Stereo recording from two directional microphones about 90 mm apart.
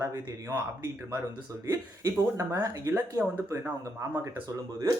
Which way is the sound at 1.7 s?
35° right (ahead or behind).